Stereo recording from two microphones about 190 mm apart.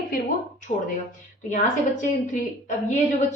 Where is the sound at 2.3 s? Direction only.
40° left (ahead or behind).